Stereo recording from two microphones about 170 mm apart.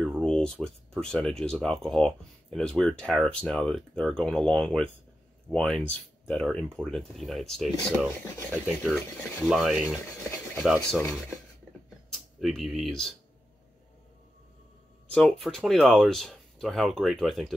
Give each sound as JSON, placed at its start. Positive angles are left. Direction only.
{"t": 0.0, "sound": "speech", "side_deg": 0}
{"t": 15.0, "sound": "speech", "side_deg": 5}